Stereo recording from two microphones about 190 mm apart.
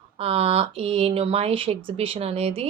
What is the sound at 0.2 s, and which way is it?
Speech, 30° right (ahead or behind).